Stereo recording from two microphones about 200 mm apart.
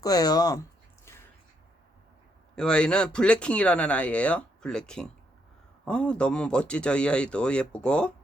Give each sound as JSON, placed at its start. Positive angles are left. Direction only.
{"t": 0.0, "sound": "speech", "side_deg": 20}
{"t": 2.6, "sound": "speech", "side_deg": 5}